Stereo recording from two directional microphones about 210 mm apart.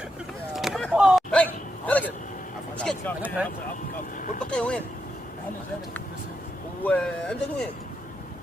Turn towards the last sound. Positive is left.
turn(degrees=5)  # may be behind; listen again after turning